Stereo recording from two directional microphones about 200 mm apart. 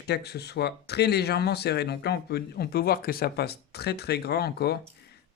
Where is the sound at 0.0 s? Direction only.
55° left (ahead or behind).